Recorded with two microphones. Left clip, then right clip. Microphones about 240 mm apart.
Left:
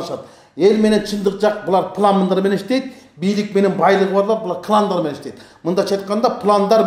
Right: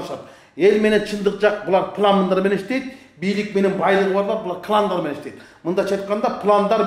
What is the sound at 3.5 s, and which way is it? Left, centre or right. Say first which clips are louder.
Speech: left 5 dB; left.